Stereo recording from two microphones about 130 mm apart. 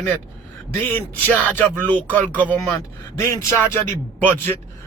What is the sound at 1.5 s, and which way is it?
Speech, 15° left (ahead or behind).